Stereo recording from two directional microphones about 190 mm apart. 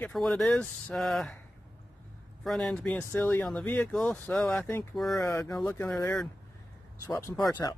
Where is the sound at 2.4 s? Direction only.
Centre (ahead or behind).